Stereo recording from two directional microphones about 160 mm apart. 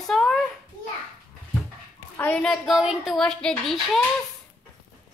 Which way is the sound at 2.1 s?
10° left (ahead or behind).